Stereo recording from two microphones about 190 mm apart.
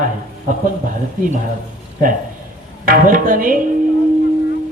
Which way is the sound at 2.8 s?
50° right (ahead or behind).